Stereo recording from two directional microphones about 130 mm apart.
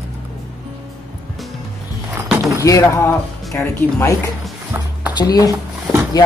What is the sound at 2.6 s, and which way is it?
Speech, 25° left (ahead or behind).